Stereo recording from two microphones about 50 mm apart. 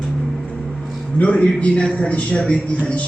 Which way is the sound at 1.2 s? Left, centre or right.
Left.